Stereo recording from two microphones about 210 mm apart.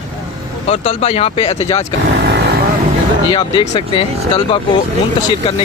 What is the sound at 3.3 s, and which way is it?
Speech, 25° left (ahead or behind).